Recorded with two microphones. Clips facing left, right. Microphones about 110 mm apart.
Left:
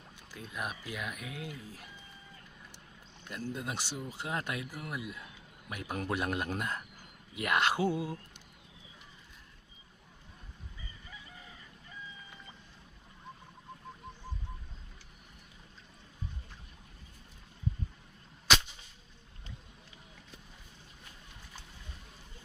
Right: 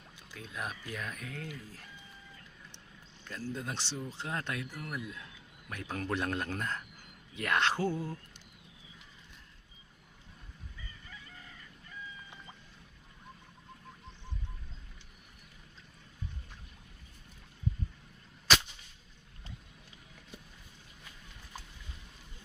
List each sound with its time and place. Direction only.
0.3 s speech: 10° left (ahead or behind)
3.2 s speech: 10° left (ahead or behind)